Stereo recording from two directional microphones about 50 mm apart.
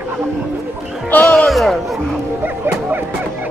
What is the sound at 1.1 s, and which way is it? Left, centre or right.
Speech, left.